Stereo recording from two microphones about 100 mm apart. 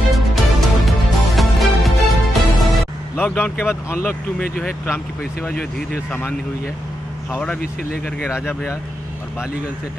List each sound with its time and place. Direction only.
0.1 s music: centre (ahead or behind)
3.2 s speech: 15° left (ahead or behind)